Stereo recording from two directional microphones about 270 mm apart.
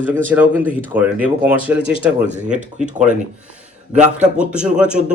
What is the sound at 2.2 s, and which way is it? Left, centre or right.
Speech, right.